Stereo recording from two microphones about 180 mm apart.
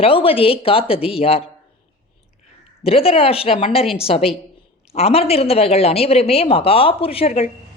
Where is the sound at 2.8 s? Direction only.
35° left (ahead or behind).